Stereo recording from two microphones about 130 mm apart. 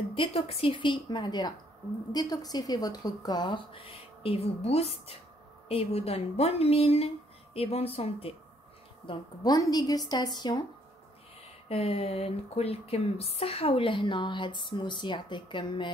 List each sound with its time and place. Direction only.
0.1 s a woman's voice: 45° left (ahead or behind)
9.0 s speech: 35° left (ahead or behind)
11.7 s speech: 50° left (ahead or behind)